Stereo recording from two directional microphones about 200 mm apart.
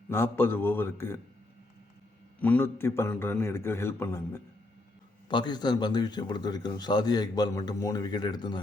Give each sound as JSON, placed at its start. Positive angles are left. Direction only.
{"t": 0.1, "sound": "a man's voice", "side_deg": 10}
{"t": 2.4, "sound": "a man's voice", "side_deg": 10}
{"t": 5.3, "sound": "a man's voice", "side_deg": 20}